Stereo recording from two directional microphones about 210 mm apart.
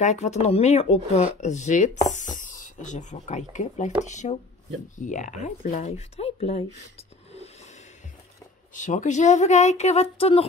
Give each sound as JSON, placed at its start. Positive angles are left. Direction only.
{"t": 0.0, "sound": "speech", "side_deg": 35}
{"t": 8.7, "sound": "speech", "side_deg": 35}